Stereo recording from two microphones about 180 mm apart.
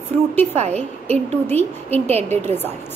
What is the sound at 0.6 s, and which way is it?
Speech, 35° right (ahead or behind).